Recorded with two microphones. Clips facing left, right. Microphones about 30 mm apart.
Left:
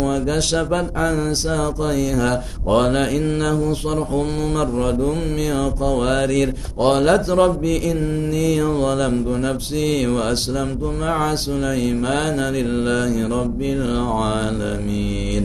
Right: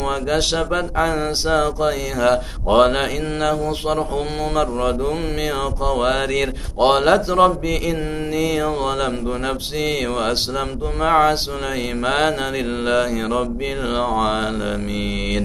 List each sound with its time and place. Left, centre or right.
0.3 s speech: centre
7.2 s speech: centre
12.8 s speech: right